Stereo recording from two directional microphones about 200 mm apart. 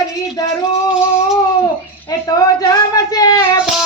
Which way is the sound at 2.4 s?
20° left (ahead or behind).